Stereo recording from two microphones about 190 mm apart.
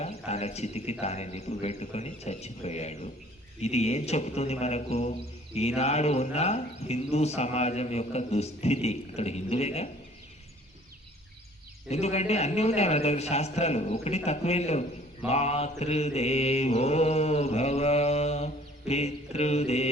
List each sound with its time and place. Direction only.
0.3 s speech: 35° left (ahead or behind)
11.9 s speech: 35° left (ahead or behind)